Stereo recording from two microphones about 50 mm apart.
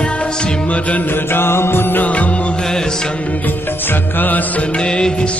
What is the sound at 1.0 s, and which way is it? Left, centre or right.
Music, left.